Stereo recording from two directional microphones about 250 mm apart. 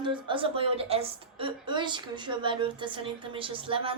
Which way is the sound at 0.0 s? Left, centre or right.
Centre.